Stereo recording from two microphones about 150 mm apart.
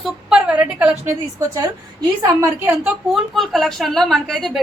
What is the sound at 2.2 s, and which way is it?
Speech, 25° right (ahead or behind).